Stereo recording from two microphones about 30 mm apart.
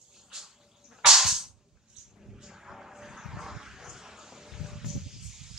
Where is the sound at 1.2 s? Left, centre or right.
Centre.